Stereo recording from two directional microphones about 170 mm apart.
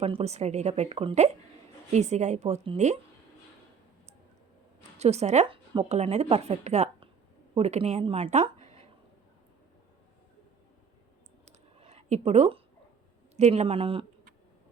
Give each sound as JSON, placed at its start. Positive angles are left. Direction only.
{"t": 0.0, "sound": "a woman's voice", "side_deg": -35}
{"t": 4.9, "sound": "speech", "side_deg": -40}
{"t": 11.4, "sound": "a sound", "side_deg": -40}
{"t": 13.3, "sound": "speech", "side_deg": -40}